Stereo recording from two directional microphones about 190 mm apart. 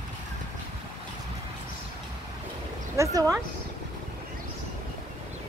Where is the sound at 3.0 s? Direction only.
15° right (ahead or behind).